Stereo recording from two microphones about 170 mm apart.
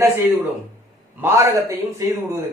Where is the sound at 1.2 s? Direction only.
15° right (ahead or behind).